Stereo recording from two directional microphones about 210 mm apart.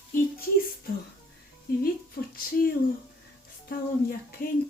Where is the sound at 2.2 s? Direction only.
50° left (ahead or behind).